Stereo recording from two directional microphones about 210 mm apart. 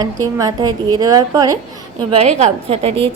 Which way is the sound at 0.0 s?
15° right (ahead or behind).